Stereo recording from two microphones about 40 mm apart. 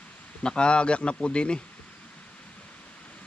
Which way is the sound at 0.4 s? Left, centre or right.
Left.